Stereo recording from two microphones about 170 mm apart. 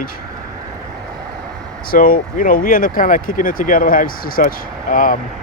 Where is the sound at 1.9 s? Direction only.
55° left (ahead or behind).